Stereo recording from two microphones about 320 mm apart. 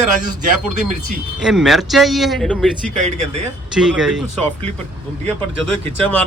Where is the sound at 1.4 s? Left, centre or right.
Centre.